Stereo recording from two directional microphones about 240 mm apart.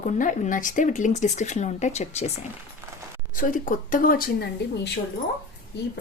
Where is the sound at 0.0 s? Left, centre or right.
Left.